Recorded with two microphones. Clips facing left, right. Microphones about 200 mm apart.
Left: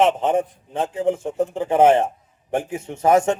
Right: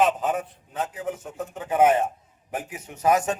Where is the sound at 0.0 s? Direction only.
25° left (ahead or behind).